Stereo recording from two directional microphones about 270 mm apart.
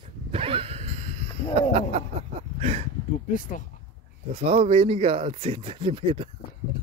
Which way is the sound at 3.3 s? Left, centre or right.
Left.